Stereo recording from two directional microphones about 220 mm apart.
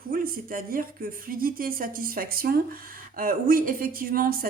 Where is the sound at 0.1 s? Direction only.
40° right (ahead or behind).